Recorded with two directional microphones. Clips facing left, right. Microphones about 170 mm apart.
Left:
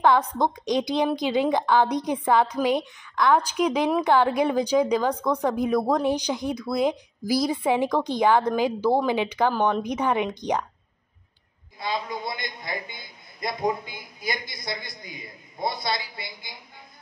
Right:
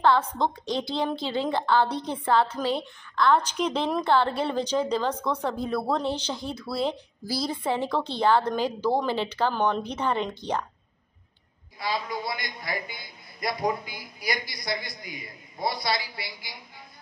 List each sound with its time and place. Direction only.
0.4 s speech: 15° left (ahead or behind)
11.8 s a man's voice: 20° left (ahead or behind)